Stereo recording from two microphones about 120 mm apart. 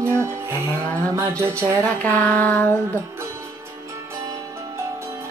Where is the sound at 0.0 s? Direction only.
20° right (ahead or behind).